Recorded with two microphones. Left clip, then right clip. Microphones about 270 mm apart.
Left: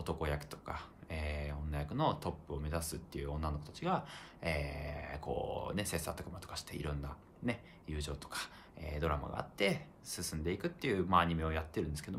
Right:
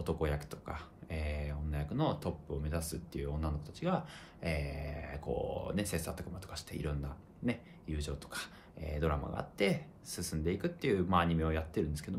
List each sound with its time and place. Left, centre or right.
0.0 s speech: centre